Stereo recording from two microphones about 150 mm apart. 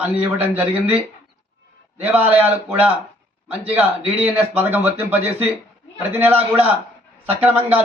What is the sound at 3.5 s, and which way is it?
A man's voice, 10° right (ahead or behind).